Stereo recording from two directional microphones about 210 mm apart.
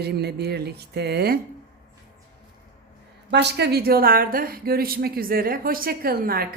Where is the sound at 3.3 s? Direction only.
55° right (ahead or behind).